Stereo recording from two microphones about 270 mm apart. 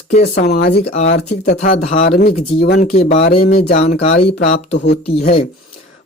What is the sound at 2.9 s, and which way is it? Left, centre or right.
Speech, left.